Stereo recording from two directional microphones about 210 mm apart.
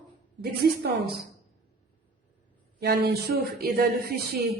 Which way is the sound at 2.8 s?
50° right (ahead or behind).